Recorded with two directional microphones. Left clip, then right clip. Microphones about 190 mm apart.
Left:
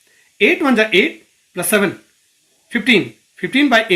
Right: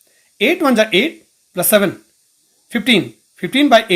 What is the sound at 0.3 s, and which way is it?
Speech, 55° right (ahead or behind).